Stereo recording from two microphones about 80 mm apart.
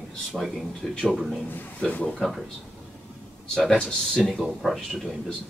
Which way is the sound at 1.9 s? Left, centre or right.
Centre.